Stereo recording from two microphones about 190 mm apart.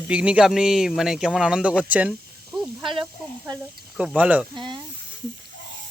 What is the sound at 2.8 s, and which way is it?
Snake, 25° right (ahead or behind).